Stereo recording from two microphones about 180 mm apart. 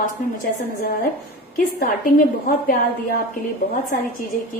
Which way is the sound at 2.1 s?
55° left (ahead or behind).